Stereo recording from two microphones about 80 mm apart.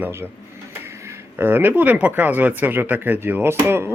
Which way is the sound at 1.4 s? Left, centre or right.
Right.